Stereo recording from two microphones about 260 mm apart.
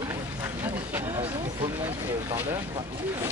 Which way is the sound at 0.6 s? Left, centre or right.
Centre.